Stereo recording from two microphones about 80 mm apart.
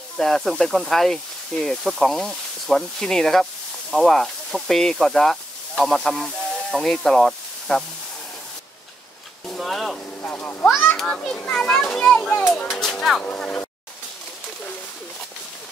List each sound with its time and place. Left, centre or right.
0.2 s speech: centre
9.5 s speech: centre
10.2 s speech: left
11.0 s a child's voice: centre
11.3 s a child's voice: centre
13.2 s a child's voice: centre